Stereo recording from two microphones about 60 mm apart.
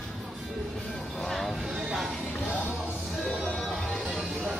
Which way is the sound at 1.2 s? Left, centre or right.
Centre.